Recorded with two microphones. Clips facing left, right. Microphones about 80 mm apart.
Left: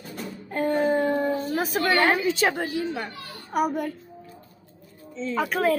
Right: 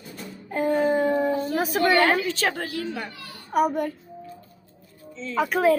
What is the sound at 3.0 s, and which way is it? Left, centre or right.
Speech, left.